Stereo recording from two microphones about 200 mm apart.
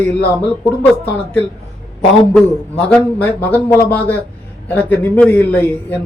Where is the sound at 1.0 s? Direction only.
10° left (ahead or behind).